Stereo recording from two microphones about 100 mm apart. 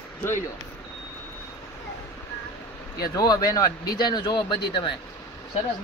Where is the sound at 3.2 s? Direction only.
40° left (ahead or behind).